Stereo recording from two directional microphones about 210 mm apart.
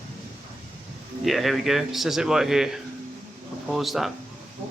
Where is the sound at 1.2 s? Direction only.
Centre (ahead or behind).